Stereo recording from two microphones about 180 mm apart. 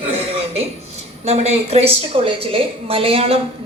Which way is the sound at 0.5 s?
35° right (ahead or behind).